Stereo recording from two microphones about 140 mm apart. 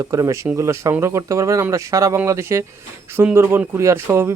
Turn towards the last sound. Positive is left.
turn(degrees=-20)  # may be behind; listen again after turning